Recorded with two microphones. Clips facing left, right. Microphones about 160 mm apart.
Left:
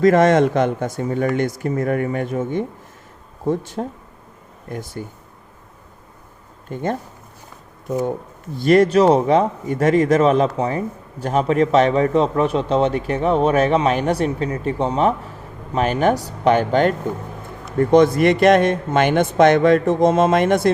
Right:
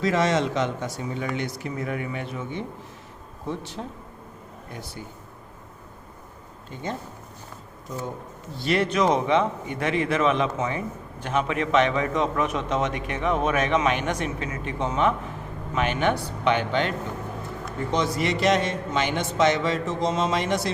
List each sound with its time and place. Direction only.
0.0 s speech: 55° left (ahead or behind)
6.7 s speech: 50° left (ahead or behind)
8.5 s a man's voice: 45° left (ahead or behind)
17.7 s a man's voice: 55° left (ahead or behind)